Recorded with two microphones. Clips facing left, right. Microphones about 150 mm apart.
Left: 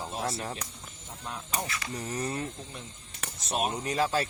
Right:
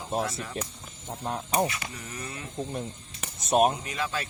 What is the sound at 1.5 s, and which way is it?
Speech, 20° right (ahead or behind).